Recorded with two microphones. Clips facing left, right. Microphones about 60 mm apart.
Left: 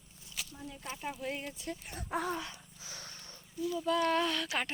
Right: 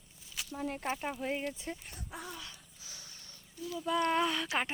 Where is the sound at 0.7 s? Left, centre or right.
Right.